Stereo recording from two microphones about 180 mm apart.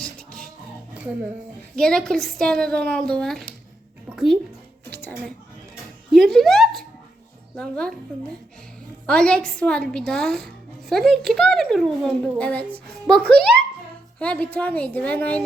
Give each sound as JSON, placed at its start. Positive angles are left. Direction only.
{"t": 0.0, "sound": "music", "side_deg": 5}
{"t": 1.7, "sound": "speech", "side_deg": 5}
{"t": 4.9, "sound": "a sound", "side_deg": 10}
{"t": 6.1, "sound": "speech", "side_deg": 0}
{"t": 9.0, "sound": "a woman's voice", "side_deg": 5}